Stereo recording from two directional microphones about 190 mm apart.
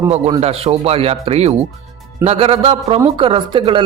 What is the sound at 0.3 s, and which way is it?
Speech, 30° right (ahead or behind).